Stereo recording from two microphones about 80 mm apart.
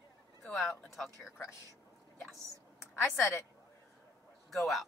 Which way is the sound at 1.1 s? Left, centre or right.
Left.